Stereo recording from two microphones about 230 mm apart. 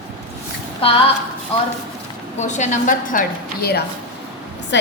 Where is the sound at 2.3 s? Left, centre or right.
Left.